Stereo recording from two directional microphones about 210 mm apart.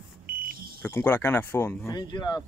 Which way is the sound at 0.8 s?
10° left (ahead or behind).